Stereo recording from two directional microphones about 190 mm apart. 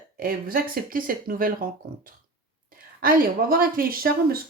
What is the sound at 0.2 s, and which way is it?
Speech, 50° right (ahead or behind).